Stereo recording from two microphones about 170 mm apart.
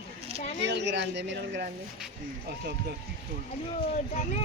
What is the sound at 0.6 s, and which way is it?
Speech, 90° right.